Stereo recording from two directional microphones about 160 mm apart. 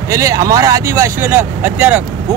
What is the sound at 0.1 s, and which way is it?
Speech, 20° right (ahead or behind).